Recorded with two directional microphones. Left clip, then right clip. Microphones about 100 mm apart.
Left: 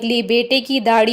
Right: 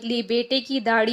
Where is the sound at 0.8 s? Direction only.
50° left (ahead or behind).